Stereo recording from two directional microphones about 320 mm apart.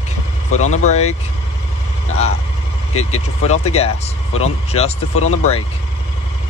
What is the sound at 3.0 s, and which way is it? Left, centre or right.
Speech, centre.